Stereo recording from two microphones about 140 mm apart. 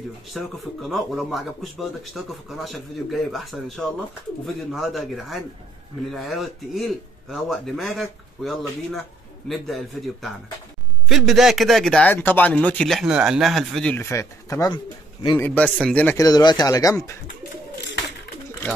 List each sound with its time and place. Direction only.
0.3 s speech: centre (ahead or behind)
12.1 s speech: 15° left (ahead or behind)
13.9 s speech: 20° left (ahead or behind)
16.2 s speech: 30° left (ahead or behind)